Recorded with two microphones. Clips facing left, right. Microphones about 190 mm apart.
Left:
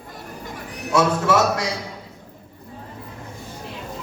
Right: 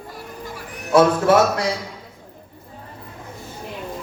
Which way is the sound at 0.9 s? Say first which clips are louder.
Right 4 dB; 55° right (ahead or behind).